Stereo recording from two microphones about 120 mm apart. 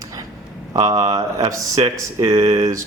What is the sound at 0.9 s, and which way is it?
Speech, 30° right (ahead or behind).